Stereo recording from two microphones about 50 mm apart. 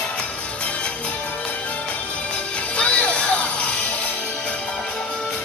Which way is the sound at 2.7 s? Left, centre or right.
Left.